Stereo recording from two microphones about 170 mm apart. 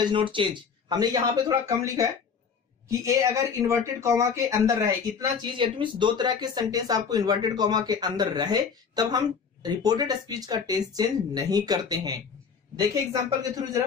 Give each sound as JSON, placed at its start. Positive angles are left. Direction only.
{"t": 0.0, "sound": "speech", "side_deg": -30}